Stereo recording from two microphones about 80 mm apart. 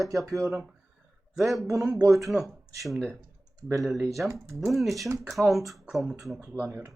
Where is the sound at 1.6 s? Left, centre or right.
Right.